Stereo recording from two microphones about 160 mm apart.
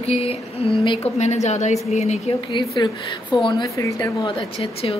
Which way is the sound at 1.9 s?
40° left (ahead or behind).